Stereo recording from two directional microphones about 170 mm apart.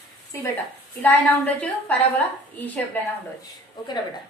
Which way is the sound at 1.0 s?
10° left (ahead or behind).